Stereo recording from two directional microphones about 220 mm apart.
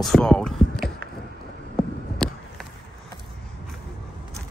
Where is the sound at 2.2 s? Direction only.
5° left (ahead or behind).